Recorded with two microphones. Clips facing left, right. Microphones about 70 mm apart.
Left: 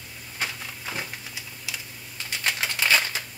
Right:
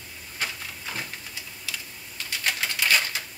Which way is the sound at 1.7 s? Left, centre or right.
Centre.